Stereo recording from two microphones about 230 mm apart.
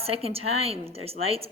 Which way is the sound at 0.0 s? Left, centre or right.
Right.